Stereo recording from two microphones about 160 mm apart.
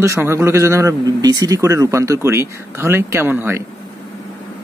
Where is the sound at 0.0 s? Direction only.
15° right (ahead or behind).